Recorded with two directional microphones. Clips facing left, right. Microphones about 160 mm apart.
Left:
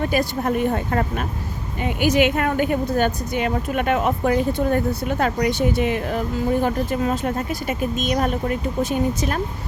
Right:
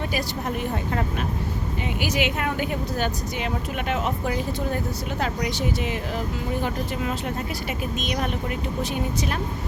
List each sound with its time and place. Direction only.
0.0 s speech: 50° left (ahead or behind)